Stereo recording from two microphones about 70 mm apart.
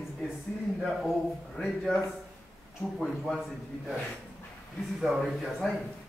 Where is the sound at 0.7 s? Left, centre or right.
Centre.